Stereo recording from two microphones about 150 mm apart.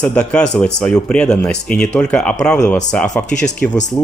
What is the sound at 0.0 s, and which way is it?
Speech, 10° left (ahead or behind).